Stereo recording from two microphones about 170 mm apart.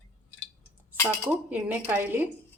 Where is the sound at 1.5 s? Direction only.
10° right (ahead or behind).